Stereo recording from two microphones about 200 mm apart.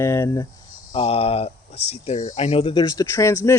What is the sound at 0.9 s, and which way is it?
Speech, 30° left (ahead or behind).